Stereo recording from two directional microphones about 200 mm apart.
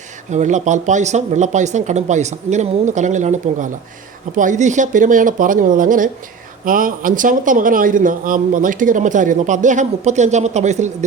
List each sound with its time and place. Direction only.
0.3 s speech: 35° right (ahead or behind)